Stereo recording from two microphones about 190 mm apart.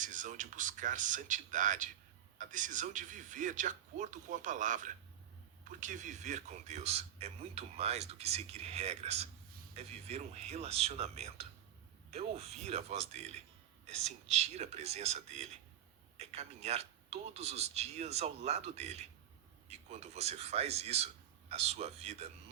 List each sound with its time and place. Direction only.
0.0 s speech: 40° right (ahead or behind)